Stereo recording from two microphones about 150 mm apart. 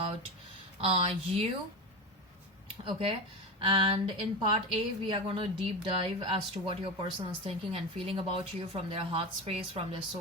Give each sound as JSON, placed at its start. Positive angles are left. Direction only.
{"t": 0.8, "sound": "speech", "side_deg": -40}
{"t": 2.8, "sound": "speech", "side_deg": -40}